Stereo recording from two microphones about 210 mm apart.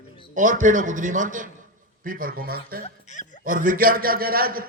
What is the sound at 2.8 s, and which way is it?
Speech, 35° left (ahead or behind).